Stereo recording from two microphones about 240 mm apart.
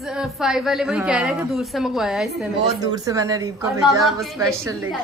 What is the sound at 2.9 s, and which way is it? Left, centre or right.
A woman's voice, centre.